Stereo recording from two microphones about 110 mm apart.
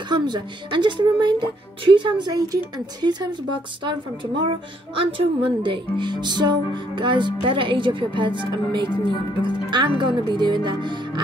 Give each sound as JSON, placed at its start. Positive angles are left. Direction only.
{"t": 0.1, "sound": "speech", "side_deg": -45}
{"t": 4.4, "sound": "speech", "side_deg": -50}